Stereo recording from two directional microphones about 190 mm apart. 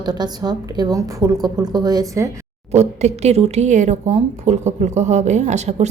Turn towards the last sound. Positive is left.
turn(degrees=-35)  # may be behind; listen again after turning